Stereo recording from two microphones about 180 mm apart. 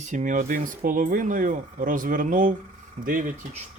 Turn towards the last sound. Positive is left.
turn(degrees=-45)  # may be behind; listen again after turning